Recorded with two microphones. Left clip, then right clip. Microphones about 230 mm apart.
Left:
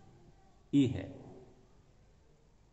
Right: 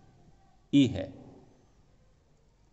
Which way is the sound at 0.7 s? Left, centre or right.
Right.